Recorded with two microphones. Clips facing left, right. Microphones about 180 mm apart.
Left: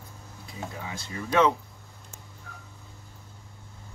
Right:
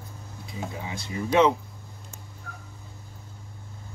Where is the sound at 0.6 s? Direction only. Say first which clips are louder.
Right 2 dB; 20° right (ahead or behind).